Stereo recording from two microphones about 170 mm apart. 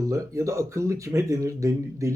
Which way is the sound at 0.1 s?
20° right (ahead or behind).